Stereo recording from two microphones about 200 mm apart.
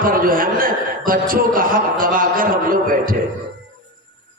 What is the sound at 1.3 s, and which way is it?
A man's voice, 45° right (ahead or behind).